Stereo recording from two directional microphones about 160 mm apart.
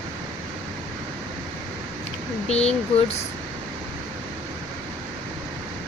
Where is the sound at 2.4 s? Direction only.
40° left (ahead or behind).